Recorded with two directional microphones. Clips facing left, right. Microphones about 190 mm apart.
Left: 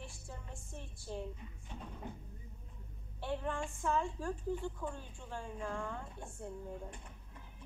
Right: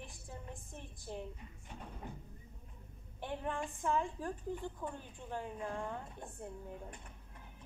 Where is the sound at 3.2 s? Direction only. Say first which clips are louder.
Left 1 dB; 15° right (ahead or behind).